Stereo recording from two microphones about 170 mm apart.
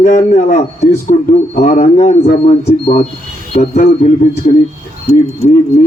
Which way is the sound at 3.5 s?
45° left (ahead or behind).